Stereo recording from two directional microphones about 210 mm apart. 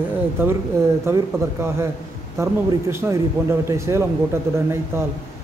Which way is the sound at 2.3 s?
15° right (ahead or behind).